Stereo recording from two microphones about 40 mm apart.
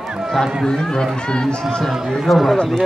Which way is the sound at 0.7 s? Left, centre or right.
Centre.